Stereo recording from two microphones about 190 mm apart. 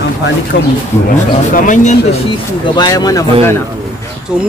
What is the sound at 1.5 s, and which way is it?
Speech, 40° left (ahead or behind).